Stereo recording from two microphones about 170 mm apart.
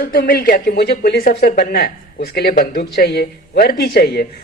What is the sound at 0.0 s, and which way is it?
A woman's voice, 60° left (ahead or behind).